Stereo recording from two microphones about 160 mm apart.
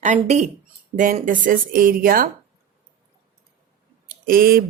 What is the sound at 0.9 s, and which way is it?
Speech, 55° right (ahead or behind).